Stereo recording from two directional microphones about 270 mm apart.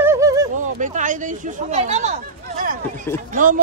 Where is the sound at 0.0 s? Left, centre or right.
Centre.